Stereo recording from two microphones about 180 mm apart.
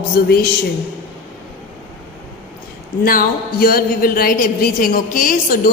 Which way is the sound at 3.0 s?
55° left (ahead or behind).